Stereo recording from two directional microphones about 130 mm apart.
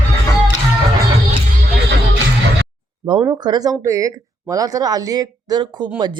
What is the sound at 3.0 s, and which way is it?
Speech, 35° right (ahead or behind).